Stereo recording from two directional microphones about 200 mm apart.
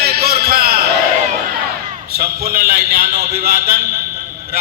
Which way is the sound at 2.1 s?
50° right (ahead or behind).